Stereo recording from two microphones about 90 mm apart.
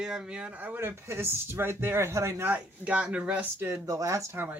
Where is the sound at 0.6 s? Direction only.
25° right (ahead or behind).